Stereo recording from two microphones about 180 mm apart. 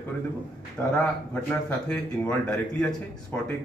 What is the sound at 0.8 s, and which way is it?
A man's voice, 5° left (ahead or behind).